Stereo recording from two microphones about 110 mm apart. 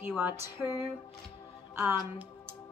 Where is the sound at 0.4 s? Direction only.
25° right (ahead or behind).